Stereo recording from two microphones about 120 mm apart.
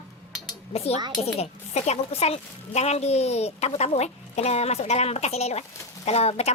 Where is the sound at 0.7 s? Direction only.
60° left (ahead or behind).